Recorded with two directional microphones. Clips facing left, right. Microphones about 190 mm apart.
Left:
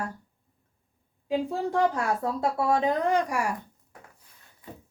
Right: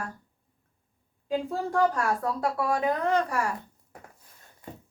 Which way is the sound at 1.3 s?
20° left (ahead or behind).